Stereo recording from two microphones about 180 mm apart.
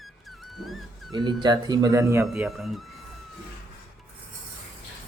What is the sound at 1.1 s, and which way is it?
Speech, 25° right (ahead or behind).